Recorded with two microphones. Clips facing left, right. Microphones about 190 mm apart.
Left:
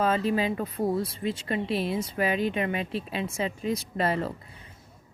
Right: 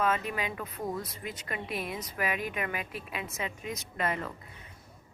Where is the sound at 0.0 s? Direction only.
30° left (ahead or behind).